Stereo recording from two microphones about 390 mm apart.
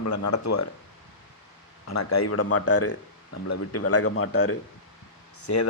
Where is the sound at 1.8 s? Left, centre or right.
Left.